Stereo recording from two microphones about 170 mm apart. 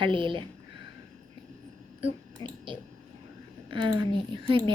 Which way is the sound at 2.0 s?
30° right (ahead or behind).